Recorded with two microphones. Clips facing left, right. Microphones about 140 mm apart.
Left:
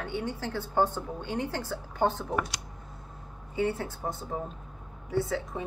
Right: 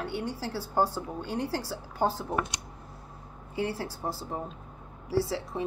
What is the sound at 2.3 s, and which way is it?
Speech, 20° right (ahead or behind).